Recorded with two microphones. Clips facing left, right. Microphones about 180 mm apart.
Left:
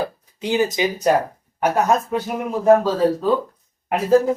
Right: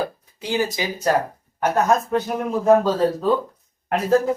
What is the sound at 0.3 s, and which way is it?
Speech, 20° left (ahead or behind).